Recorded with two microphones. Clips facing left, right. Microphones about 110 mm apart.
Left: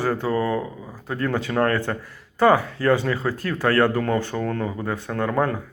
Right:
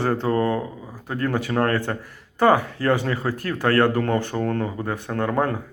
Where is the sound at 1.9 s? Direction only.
30° right (ahead or behind).